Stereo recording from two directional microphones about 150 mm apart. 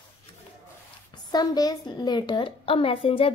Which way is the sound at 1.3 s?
25° left (ahead or behind).